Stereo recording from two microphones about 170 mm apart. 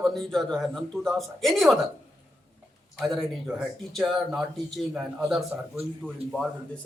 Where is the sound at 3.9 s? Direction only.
Centre (ahead or behind).